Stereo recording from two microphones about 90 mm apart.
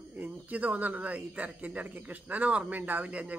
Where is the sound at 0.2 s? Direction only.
15° right (ahead or behind).